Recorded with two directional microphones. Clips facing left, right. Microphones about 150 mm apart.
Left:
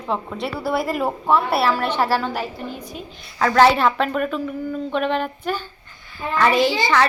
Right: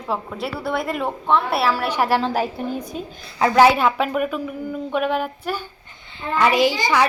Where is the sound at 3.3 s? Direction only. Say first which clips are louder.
Even; 15° right (ahead or behind).